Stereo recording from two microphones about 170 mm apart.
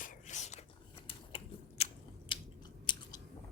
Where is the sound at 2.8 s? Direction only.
25° left (ahead or behind).